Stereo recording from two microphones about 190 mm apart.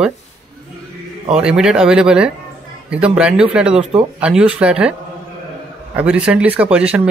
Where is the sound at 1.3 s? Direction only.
5° right (ahead or behind).